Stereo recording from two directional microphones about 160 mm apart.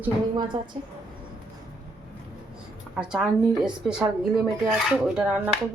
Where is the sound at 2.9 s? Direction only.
5° right (ahead or behind).